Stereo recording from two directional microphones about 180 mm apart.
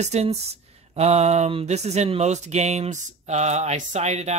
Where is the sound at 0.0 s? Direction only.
35° right (ahead or behind).